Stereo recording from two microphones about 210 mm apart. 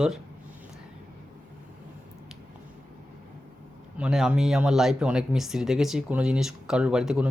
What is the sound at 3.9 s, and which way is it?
Speech, 5° right (ahead or behind).